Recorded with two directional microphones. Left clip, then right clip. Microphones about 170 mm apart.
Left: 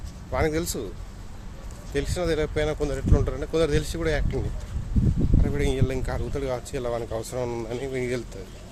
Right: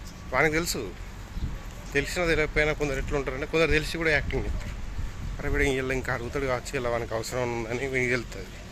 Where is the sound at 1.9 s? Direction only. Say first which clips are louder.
Right 1 dB; 20° left (ahead or behind).